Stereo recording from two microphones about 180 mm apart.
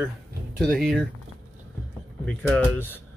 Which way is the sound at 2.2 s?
10° left (ahead or behind).